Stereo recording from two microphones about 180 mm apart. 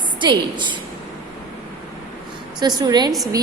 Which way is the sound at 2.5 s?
25° right (ahead or behind).